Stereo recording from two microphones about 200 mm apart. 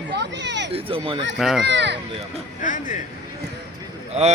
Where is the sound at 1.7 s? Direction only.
60° right (ahead or behind).